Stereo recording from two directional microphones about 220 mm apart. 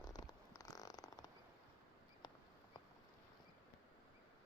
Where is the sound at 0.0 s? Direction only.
15° left (ahead or behind).